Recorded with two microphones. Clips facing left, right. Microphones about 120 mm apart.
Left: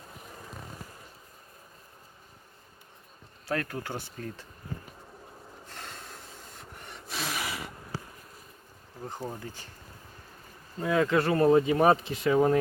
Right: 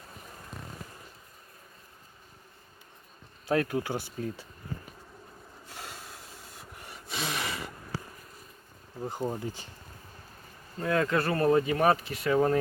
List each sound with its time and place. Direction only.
3.4 s speech: 15° right (ahead or behind)
5.6 s rub: 5° right (ahead or behind)
9.0 s speech: 15° right (ahead or behind)
10.8 s speech: 10° left (ahead or behind)
12.3 s speech: 10° left (ahead or behind)